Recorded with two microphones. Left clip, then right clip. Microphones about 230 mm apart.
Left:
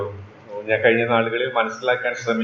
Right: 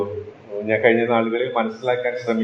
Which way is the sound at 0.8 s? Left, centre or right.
Right.